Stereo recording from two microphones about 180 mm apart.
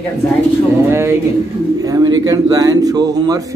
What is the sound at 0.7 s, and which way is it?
Speech, 15° right (ahead or behind).